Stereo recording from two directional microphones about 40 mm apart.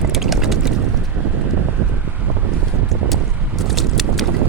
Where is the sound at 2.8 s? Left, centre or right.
Centre.